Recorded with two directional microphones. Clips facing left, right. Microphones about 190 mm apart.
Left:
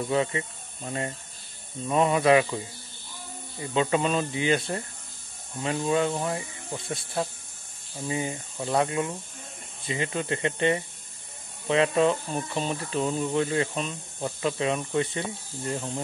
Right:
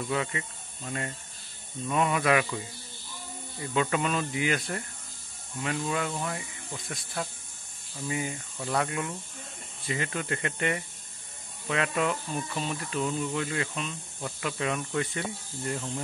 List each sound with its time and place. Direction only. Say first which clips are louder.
0.1 s speech: left 6 dB; 30° left (ahead or behind)